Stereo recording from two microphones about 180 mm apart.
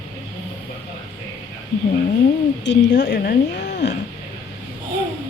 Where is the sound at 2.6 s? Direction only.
70° left (ahead or behind).